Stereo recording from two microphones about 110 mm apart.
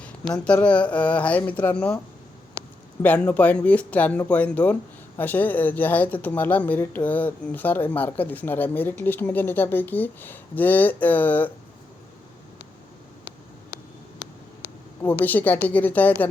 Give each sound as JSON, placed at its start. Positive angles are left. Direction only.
{"t": 0.0, "sound": "speech", "side_deg": 10}
{"t": 3.0, "sound": "speech", "side_deg": 15}
{"t": 15.2, "sound": "speech", "side_deg": 15}